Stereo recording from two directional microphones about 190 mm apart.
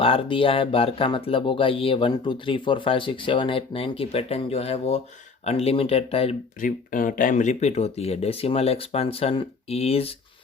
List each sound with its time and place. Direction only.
0.0 s speech: 30° left (ahead or behind)
6.6 s speech: 45° left (ahead or behind); by 10.2 s 30° left (ahead or behind)